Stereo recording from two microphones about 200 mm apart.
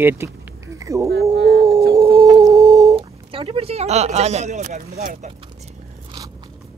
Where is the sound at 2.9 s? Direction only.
25° right (ahead or behind).